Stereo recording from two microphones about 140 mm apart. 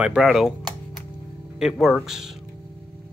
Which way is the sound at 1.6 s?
5° right (ahead or behind).